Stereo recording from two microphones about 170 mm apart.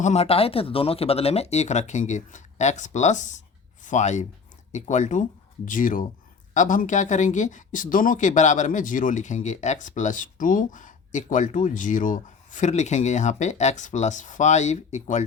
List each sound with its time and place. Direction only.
0.0 s speech: 40° left (ahead or behind)